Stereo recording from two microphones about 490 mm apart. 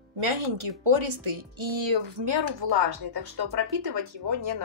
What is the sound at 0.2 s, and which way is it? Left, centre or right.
Speech, right.